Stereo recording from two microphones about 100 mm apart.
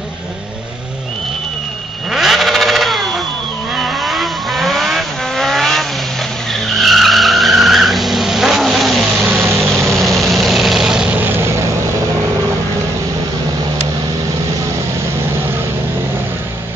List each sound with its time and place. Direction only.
2.0 s vehicle: centre (ahead or behind)
9.4 s vehicle: 25° right (ahead or behind)
9.9 s vehicle: centre (ahead or behind)